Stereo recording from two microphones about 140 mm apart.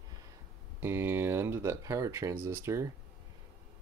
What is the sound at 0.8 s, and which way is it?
Speech, 15° right (ahead or behind).